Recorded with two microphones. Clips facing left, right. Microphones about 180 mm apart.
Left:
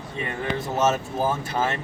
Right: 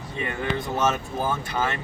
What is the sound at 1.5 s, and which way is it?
Speech, 40° left (ahead or behind).